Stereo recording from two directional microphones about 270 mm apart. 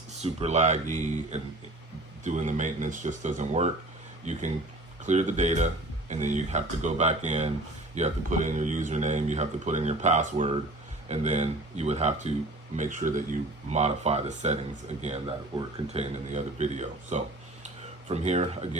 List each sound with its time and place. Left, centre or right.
0.1 s speech: right